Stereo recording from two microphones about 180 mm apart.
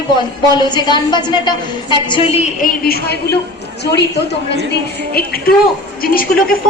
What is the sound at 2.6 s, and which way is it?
A woman's voice, 60° left (ahead or behind).